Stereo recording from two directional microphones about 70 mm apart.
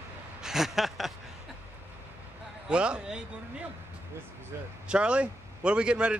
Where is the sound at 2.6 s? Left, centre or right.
Centre.